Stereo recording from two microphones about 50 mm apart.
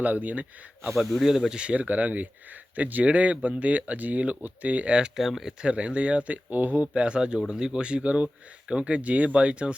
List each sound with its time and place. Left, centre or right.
0.0 s speech: right
1.2 s speech: centre
1.5 s speech: right
5.1 s speech: centre
5.6 s speech: right
6.8 s speech: right